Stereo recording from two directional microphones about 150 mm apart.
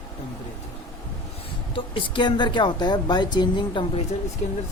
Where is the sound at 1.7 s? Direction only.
35° left (ahead or behind).